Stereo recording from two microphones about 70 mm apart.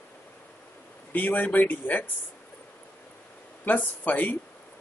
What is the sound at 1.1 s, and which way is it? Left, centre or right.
Speech, left.